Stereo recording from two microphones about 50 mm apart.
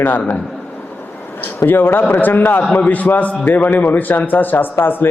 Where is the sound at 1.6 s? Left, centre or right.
Left.